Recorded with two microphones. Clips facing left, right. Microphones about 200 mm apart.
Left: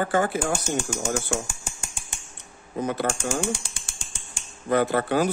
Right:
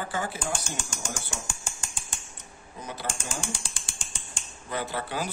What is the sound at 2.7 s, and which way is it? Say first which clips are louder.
Speech: left 11 dB; 60° left (ahead or behind).